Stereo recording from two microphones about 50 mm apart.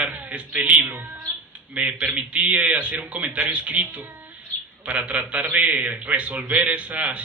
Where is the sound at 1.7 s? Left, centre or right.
Right.